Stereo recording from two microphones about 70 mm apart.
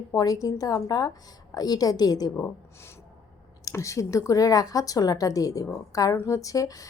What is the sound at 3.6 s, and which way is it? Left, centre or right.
Speech, left.